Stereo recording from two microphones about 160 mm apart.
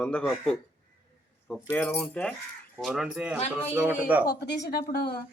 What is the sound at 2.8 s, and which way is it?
Speech, 5° right (ahead or behind).